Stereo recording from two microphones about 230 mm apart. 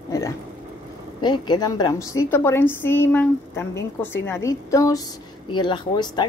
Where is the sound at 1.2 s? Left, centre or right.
Centre.